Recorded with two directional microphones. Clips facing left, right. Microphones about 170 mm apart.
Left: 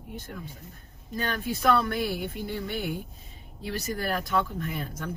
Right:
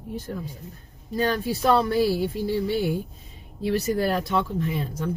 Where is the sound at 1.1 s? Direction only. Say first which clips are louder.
Right 6 dB; 35° right (ahead or behind).